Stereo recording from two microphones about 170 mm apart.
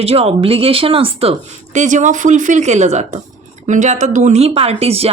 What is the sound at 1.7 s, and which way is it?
A woman's voice, 45° right (ahead or behind).